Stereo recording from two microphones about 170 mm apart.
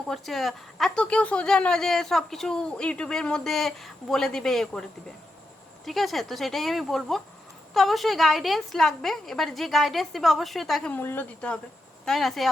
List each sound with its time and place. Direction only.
0.1 s a woman's voice: centre (ahead or behind)